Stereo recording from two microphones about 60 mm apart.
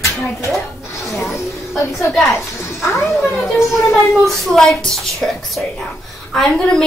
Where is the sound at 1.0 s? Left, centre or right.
Left.